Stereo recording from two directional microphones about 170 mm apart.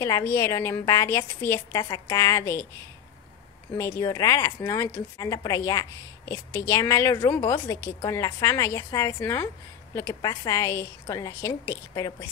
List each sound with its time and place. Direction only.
0.0 s a woman's voice: 20° left (ahead or behind)
4.0 s a woman's voice: 20° left (ahead or behind)